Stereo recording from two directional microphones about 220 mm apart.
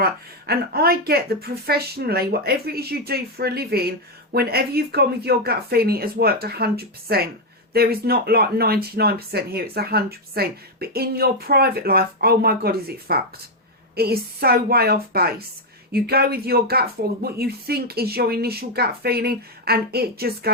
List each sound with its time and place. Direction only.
0.0 s speech: 45° right (ahead or behind)